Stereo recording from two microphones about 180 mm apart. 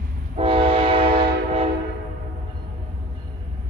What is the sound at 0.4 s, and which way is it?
Train, 30° right (ahead or behind).